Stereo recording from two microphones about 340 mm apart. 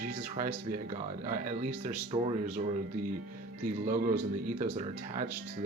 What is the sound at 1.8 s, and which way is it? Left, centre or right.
Speech, centre.